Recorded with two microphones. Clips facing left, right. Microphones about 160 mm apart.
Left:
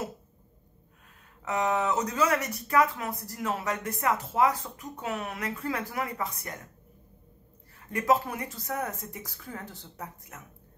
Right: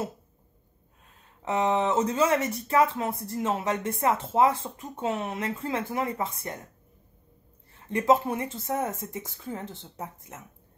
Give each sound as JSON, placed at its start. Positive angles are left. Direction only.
{"t": 1.4, "sound": "speech", "side_deg": -25}
{"t": 7.7, "sound": "speech", "side_deg": -25}